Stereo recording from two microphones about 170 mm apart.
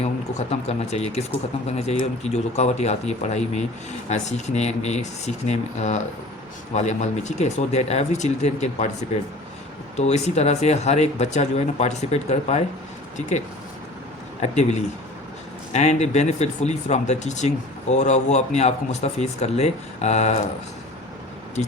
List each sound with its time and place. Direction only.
0.0 s speech: 40° left (ahead or behind)
10.0 s speech: 40° left (ahead or behind)
14.4 s speech: 40° left (ahead or behind)